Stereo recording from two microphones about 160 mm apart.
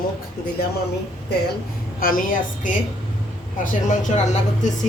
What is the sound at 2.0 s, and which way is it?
A woman's voice, 60° left (ahead or behind).